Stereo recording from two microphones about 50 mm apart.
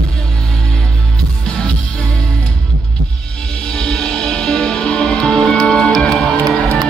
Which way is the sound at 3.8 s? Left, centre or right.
Centre.